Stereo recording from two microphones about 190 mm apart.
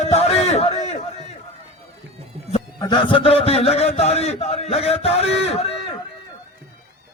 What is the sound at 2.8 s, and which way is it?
A man's voice, 25° left (ahead or behind).